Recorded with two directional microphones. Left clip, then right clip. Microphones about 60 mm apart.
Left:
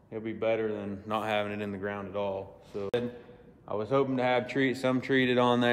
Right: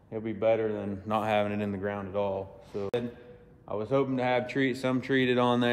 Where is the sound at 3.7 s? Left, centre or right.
Left.